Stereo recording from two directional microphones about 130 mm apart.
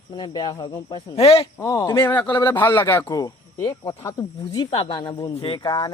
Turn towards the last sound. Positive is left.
turn(degrees=35)  # may be behind; listen again after turning